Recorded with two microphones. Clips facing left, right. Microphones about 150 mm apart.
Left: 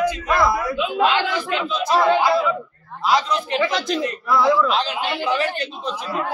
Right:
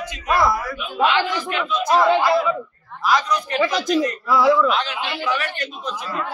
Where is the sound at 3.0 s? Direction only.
25° left (ahead or behind).